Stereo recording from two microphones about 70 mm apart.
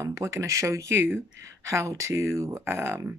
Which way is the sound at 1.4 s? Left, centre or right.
Right.